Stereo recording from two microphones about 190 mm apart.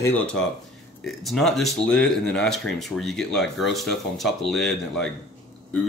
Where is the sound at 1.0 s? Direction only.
Centre (ahead or behind).